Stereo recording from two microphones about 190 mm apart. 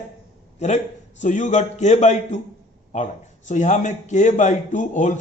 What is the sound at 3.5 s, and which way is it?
A man's voice, 40° left (ahead or behind).